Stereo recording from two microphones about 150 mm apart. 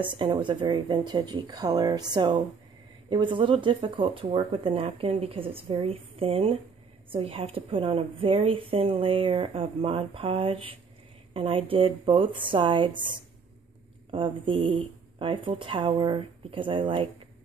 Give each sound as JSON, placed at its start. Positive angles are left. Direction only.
{"t": 0.2, "sound": "a woman's voice", "side_deg": -35}
{"t": 14.1, "sound": "a woman's voice", "side_deg": -35}